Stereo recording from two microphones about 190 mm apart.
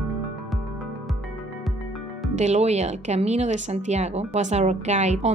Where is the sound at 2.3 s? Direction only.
35° right (ahead or behind).